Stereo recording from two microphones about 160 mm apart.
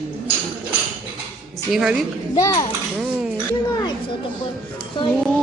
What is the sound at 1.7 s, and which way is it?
Speech, 5° right (ahead or behind).